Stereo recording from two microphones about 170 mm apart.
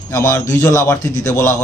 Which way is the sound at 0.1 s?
20° left (ahead or behind).